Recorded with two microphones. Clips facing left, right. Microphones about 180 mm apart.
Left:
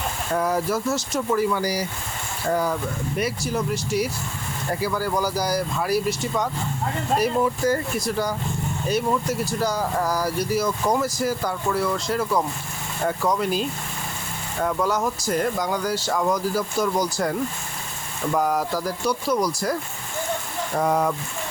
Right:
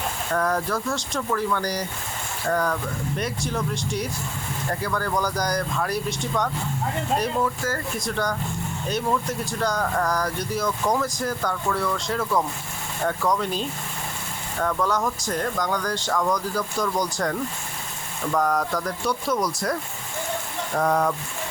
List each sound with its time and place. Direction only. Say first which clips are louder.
0.3 s speech: left 2 dB; 10° left (ahead or behind)
7.9 s speech: left 2 dB; 5° left (ahead or behind)
20.7 s speech: even; centre (ahead or behind)